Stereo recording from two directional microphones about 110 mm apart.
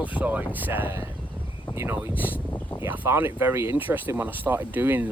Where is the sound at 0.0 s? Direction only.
15° right (ahead or behind).